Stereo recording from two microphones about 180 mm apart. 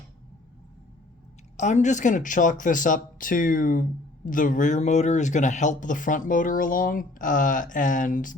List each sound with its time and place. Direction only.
1.5 s speech: 40° left (ahead or behind)